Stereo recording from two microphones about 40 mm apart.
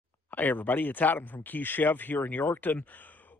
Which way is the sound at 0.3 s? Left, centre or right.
Left.